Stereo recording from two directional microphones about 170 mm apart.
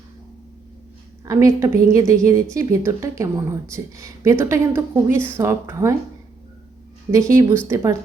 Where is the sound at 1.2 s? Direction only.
20° right (ahead or behind).